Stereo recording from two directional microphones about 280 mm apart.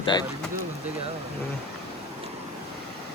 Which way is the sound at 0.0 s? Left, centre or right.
Centre.